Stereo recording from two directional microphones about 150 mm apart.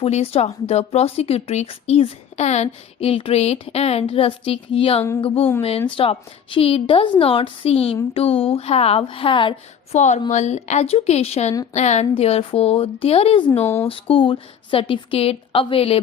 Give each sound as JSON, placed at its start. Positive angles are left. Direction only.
{"t": 0.0, "sound": "speech", "side_deg": 40}
{"t": 9.9, "sound": "speech", "side_deg": 50}